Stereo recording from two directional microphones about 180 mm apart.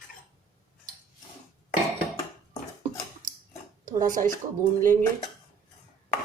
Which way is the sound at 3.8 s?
45° right (ahead or behind).